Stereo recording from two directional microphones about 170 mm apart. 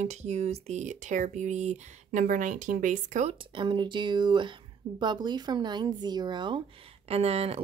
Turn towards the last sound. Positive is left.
turn(degrees=-35)  # may be behind; listen again after turning